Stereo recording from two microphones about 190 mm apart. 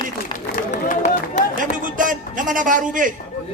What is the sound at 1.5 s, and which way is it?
A man's voice, 45° right (ahead or behind).